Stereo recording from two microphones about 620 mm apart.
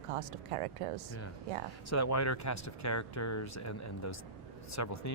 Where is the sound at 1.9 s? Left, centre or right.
Left.